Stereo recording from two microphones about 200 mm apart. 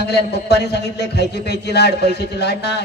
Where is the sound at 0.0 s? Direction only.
55° left (ahead or behind).